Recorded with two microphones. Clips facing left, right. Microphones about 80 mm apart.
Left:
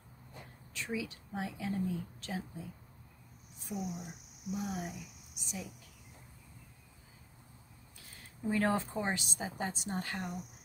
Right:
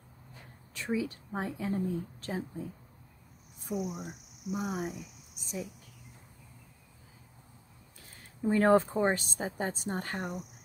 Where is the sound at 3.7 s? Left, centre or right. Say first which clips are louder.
Right 5 dB; right.